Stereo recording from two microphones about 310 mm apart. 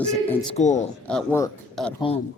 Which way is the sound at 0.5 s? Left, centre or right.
Left.